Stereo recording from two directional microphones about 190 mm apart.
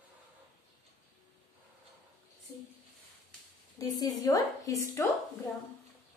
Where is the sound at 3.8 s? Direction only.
20° left (ahead or behind).